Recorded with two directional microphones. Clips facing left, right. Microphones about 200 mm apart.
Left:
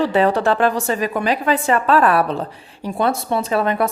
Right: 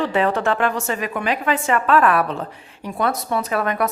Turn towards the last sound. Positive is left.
turn(degrees=30)  # may be behind; listen again after turning